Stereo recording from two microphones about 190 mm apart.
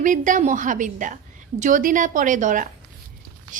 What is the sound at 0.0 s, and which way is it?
A woman's voice, 45° right (ahead or behind).